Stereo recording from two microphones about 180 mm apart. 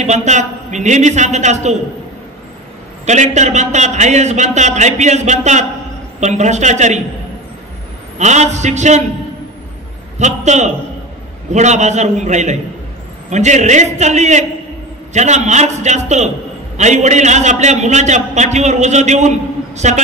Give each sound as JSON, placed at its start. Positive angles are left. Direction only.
{"t": 0.0, "sound": "a man's voice", "side_deg": -40}
{"t": 3.1, "sound": "a man's voice", "side_deg": -40}
{"t": 8.2, "sound": "a man's voice", "side_deg": -40}
{"t": 10.1, "sound": "a man's voice", "side_deg": -40}